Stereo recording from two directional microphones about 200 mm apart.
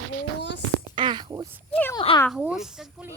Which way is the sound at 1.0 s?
20° right (ahead or behind).